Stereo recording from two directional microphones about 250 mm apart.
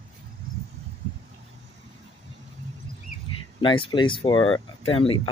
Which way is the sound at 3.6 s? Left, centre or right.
Centre.